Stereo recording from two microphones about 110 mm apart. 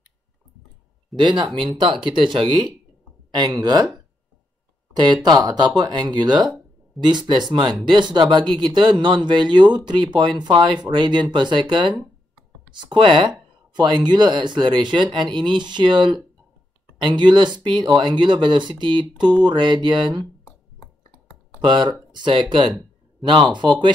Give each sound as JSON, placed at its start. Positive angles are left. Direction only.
{"t": 1.1, "sound": "speech", "side_deg": -45}
{"t": 4.9, "sound": "speech", "side_deg": -40}
{"t": 12.7, "sound": "speech", "side_deg": -45}
{"t": 21.6, "sound": "speech", "side_deg": -45}